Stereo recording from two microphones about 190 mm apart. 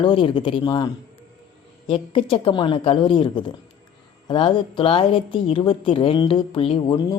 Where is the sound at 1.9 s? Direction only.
30° left (ahead or behind).